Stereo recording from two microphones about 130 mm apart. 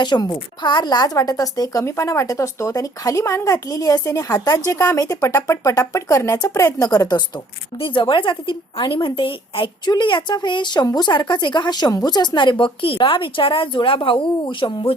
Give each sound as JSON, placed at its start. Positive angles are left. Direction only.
{"t": 0.0, "sound": "speech", "side_deg": 30}
{"t": 7.8, "sound": "speech", "side_deg": 40}